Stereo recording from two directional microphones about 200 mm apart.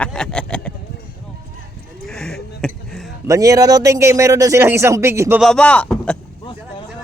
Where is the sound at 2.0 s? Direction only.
5° left (ahead or behind).